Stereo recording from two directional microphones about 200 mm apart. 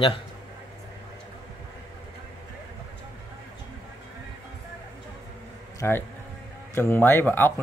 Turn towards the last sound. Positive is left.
turn(degrees=10)  # may be behind; listen again after turning